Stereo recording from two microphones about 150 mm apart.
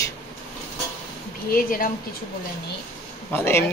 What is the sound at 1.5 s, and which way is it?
Speech, 70° left (ahead or behind).